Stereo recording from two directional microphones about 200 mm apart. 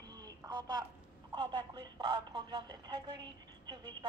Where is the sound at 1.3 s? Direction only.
25° right (ahead or behind).